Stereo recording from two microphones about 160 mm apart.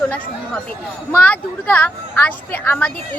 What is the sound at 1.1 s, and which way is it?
A woman's voice, 10° left (ahead or behind).